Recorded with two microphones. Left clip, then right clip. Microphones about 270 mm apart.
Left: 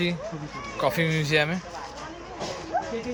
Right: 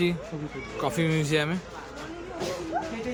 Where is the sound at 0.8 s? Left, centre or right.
Centre.